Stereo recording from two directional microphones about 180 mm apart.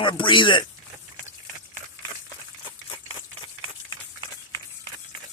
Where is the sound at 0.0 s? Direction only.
25° left (ahead or behind).